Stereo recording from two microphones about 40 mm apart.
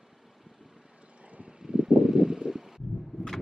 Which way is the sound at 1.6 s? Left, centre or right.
Centre.